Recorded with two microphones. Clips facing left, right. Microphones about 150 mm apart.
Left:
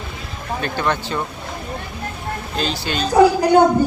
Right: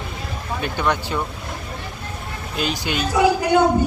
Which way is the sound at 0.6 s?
10° right (ahead or behind).